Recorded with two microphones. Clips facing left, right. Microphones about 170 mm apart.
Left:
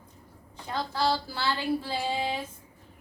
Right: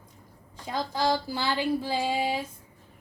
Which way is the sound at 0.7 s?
15° right (ahead or behind).